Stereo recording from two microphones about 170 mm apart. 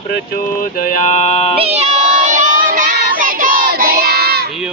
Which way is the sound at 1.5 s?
40° right (ahead or behind).